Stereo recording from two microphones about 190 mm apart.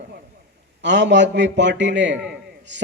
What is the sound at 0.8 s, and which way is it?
A man's voice, 70° right (ahead or behind).